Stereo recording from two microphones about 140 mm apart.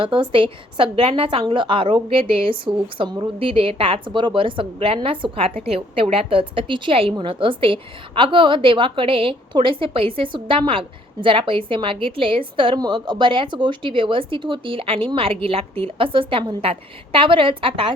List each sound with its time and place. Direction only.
0.0 s a woman's voice: 35° right (ahead or behind)